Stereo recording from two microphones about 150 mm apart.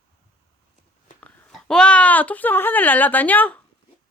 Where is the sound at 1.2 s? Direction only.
10° left (ahead or behind).